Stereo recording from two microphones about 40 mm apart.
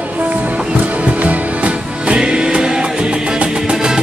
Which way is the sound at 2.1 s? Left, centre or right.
Right.